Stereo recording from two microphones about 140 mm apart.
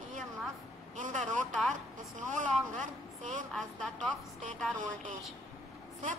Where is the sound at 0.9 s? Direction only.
65° right (ahead or behind).